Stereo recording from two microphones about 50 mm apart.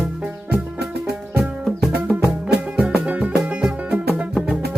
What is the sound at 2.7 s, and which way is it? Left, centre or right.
Music, right.